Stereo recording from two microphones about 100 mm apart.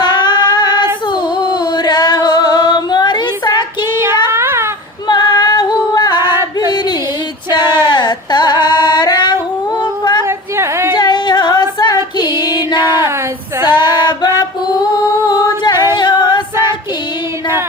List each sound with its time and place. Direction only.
0.0 s female singing: 50° left (ahead or behind)
4.3 s a sound: 25° right (ahead or behind)
5.0 s female singing: 45° left (ahead or behind)
6.6 s singing: 45° left (ahead or behind)
7.5 s a sound: 50° left (ahead or behind)
7.9 s music: 50° left (ahead or behind)
10.2 s a sound: 25° right (ahead or behind)
10.9 s female singing: 50° left (ahead or behind)
12.4 s music: 50° left (ahead or behind)
13.7 s female singing: 50° left (ahead or behind)
15.3 s singing: 40° left (ahead or behind)
16.0 s music: 50° left (ahead or behind)